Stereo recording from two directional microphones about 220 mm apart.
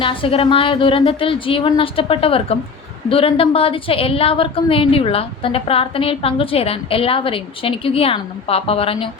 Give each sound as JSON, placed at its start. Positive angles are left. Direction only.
{"t": 0.0, "sound": "a woman's voice", "side_deg": 25}